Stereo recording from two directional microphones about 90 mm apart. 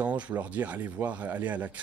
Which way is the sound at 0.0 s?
15° right (ahead or behind).